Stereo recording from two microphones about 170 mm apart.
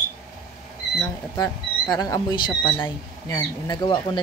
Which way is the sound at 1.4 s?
20° left (ahead or behind).